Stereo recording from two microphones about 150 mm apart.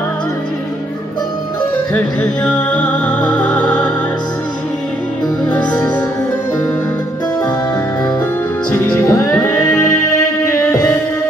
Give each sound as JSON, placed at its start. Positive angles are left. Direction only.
{"t": 2.0, "sound": "music", "side_deg": 10}
{"t": 5.5, "sound": "music", "side_deg": 10}
{"t": 8.7, "sound": "music", "side_deg": 20}